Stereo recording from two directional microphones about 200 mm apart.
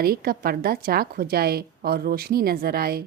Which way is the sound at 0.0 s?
50° right (ahead or behind).